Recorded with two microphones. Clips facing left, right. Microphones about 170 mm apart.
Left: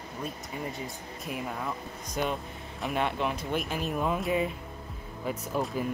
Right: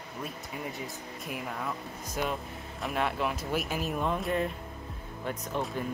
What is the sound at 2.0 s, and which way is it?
Speech, 5° right (ahead or behind).